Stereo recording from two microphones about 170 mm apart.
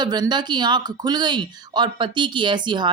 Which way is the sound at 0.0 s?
25° right (ahead or behind).